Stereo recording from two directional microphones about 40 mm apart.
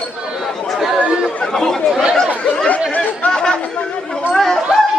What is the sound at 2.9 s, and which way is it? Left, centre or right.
Chatter, left.